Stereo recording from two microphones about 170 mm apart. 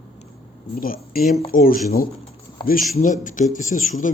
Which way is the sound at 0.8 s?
60° left (ahead or behind).